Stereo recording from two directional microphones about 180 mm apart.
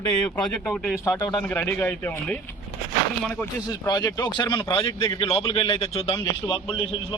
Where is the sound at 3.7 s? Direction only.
20° left (ahead or behind).